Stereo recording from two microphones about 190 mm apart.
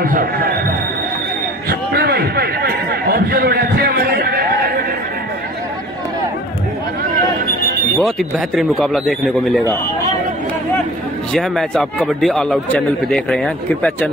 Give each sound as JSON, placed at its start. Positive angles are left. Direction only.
{"t": 0.0, "sound": "speech", "side_deg": -50}
{"t": 1.7, "sound": "a sound", "side_deg": -55}
{"t": 8.0, "sound": "speech", "side_deg": 0}
{"t": 11.3, "sound": "speech", "side_deg": 5}